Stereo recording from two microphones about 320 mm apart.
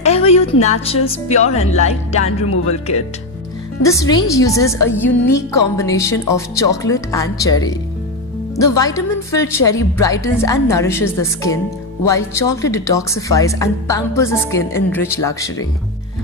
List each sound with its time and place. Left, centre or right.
0.0 s a woman's voice: centre
3.8 s speech: centre
8.5 s speech: centre